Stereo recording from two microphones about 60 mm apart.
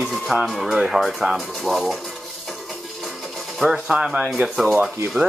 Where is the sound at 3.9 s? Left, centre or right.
Centre.